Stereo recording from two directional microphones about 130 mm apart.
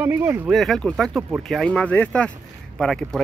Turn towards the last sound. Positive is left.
turn(degrees=5)  # may be behind; listen again after turning